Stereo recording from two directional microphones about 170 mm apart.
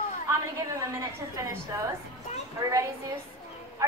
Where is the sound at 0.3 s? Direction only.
20° right (ahead or behind).